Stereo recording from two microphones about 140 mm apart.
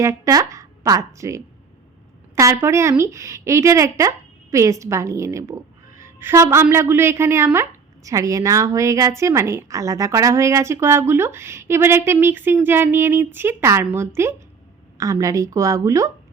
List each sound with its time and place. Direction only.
0.0 s a woman's voice: 25° right (ahead or behind)